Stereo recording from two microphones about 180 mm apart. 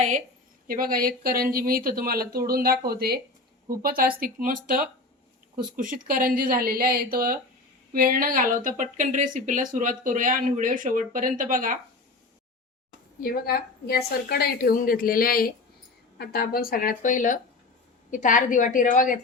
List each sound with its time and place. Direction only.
0.7 s speech: 55° right (ahead or behind)
13.1 s a woman's voice: 55° left (ahead or behind)